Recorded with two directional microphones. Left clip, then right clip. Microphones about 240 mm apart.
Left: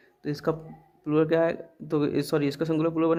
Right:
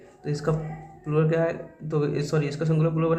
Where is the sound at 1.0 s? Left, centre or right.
Left.